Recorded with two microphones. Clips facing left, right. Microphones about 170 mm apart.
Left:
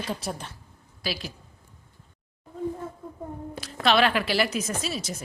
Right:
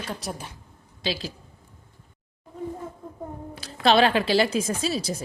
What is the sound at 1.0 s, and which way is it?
Speech, 25° right (ahead or behind).